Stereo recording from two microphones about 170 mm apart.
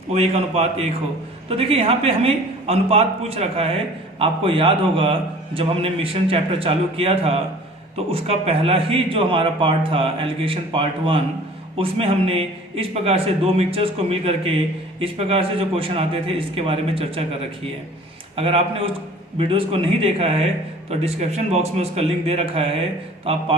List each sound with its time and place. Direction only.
0.1 s a man's voice: 35° right (ahead or behind)
18.3 s a man's voice: 35° right (ahead or behind)